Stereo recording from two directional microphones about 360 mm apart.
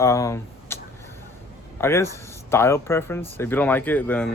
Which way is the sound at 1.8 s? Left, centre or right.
Centre.